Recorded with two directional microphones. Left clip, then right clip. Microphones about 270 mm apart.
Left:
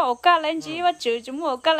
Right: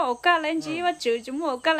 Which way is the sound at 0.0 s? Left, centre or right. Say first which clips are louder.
Left 3 dB; centre.